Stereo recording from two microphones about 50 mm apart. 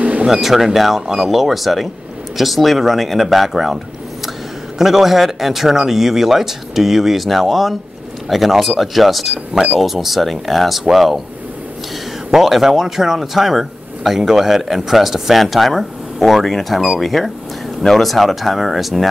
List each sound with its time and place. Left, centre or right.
0.0 s a sound: right
0.3 s speech: centre
12.3 s speech: centre